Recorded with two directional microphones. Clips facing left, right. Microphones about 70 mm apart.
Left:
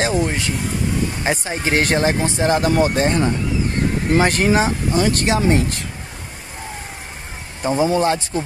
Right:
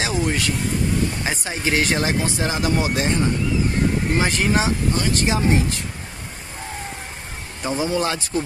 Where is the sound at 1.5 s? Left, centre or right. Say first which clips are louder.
Left 1 dB; left.